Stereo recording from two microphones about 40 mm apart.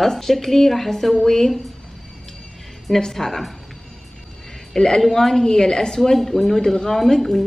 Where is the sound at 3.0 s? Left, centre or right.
Centre.